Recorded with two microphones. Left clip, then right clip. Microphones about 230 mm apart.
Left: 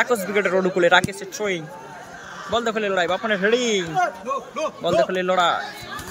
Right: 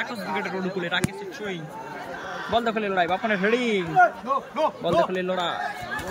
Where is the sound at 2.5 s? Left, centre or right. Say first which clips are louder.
Left 2 dB; centre.